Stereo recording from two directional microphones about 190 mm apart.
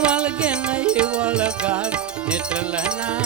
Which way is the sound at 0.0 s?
5° right (ahead or behind).